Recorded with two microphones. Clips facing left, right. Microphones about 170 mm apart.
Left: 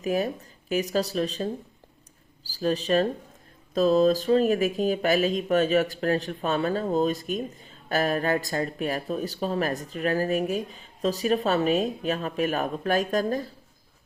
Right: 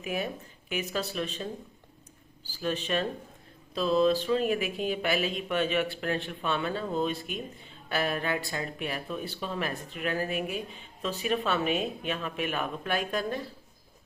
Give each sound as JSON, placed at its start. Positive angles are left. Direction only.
{"t": 0.0, "sound": "speech", "side_deg": 40}